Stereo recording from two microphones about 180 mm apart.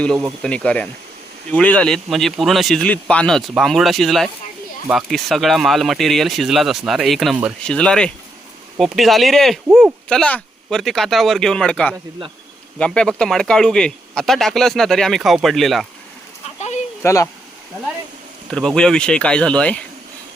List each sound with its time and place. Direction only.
0.0 s speech: 5° left (ahead or behind)
16.6 s a sound: 40° left (ahead or behind)
17.0 s speech: 15° left (ahead or behind)
18.5 s speech: 5° left (ahead or behind)